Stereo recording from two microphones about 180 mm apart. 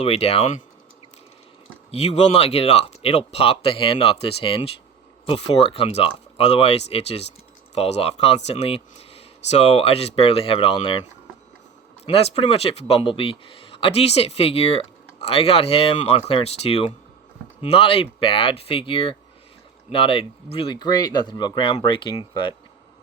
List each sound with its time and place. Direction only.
0.0 s speech: 35° left (ahead or behind)
1.9 s speech: 35° left (ahead or behind)
12.0 s speech: 35° left (ahead or behind)